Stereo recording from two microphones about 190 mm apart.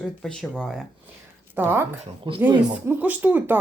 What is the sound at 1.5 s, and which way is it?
Speech, 10° right (ahead or behind).